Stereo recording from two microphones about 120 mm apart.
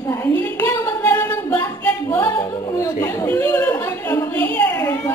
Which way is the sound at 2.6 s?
30° left (ahead or behind).